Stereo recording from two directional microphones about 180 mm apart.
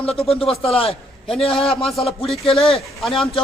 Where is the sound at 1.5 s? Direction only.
Centre (ahead or behind).